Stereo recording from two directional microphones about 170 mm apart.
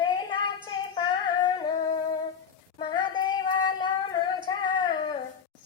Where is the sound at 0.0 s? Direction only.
25° left (ahead or behind).